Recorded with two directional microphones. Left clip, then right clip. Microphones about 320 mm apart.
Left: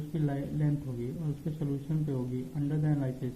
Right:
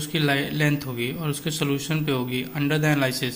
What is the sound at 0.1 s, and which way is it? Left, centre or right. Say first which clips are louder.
A man's voice: right 12 dB; right.